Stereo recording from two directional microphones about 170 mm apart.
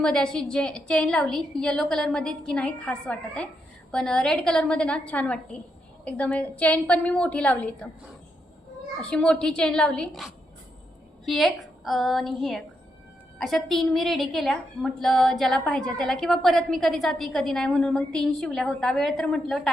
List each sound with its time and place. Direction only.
0.0 s a woman's voice: 5° left (ahead or behind)
9.0 s a woman's voice: 5° left (ahead or behind)